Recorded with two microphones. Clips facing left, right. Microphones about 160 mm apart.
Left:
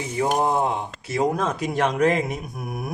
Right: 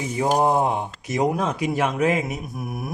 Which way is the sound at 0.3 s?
20° right (ahead or behind).